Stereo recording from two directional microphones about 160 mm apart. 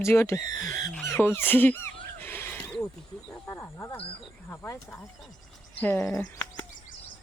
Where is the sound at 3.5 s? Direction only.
20° left (ahead or behind).